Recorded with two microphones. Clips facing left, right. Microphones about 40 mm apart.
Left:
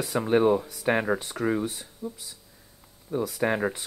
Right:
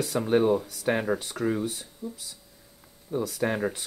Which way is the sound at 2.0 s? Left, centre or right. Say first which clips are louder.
Left 2 dB; left.